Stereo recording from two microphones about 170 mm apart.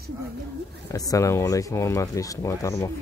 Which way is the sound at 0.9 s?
20° left (ahead or behind).